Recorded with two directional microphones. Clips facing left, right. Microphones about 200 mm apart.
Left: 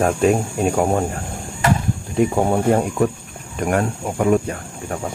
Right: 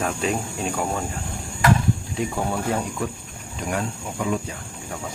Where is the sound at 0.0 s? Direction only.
50° left (ahead or behind).